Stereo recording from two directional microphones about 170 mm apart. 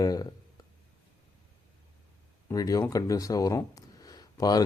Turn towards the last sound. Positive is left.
turn(degrees=20)  # may be behind; listen again after turning